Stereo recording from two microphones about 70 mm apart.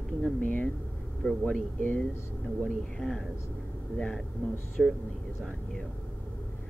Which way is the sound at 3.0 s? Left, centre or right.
Centre.